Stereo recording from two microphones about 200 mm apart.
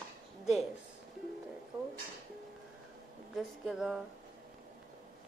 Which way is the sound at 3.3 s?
Centre (ahead or behind).